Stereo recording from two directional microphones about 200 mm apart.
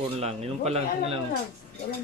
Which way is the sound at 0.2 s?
30° right (ahead or behind).